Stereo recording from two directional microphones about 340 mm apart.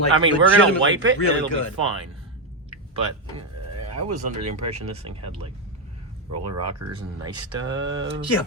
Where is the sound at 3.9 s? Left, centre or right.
Right.